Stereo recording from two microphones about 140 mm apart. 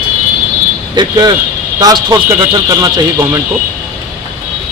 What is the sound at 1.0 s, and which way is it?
Speech, 30° right (ahead or behind).